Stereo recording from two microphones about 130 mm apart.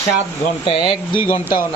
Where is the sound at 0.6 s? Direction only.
45° left (ahead or behind).